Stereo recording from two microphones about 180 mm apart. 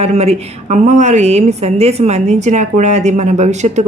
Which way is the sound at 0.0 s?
35° right (ahead or behind).